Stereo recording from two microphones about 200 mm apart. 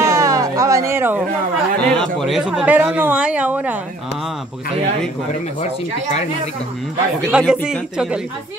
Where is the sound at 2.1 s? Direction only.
Centre (ahead or behind).